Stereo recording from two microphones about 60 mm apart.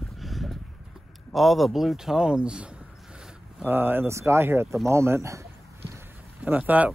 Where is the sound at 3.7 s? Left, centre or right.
Right.